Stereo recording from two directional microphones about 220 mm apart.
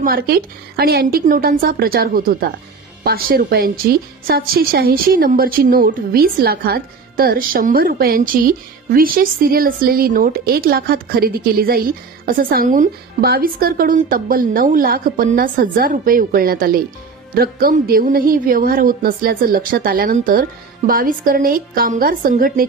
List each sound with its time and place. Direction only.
0.0 s a woman's voice: 45° right (ahead or behind)